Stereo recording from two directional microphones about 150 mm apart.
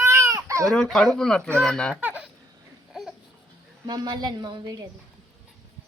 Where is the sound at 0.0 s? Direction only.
20° right (ahead or behind).